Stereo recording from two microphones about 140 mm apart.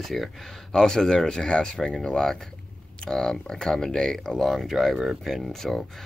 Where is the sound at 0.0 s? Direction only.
Centre (ahead or behind).